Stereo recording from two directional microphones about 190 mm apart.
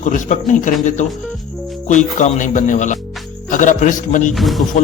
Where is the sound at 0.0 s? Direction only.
40° left (ahead or behind).